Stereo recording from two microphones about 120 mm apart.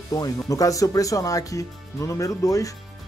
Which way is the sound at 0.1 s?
30° left (ahead or behind).